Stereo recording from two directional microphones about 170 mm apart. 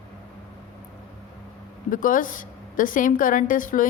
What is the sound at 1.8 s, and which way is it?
A woman's voice, 55° left (ahead or behind).